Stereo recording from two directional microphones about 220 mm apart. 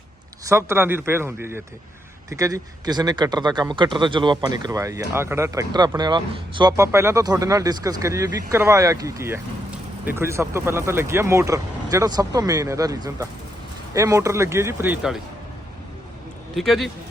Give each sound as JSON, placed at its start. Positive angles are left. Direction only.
{"t": 0.4, "sound": "speech", "side_deg": -10}
{"t": 16.6, "sound": "a man's voice", "side_deg": 0}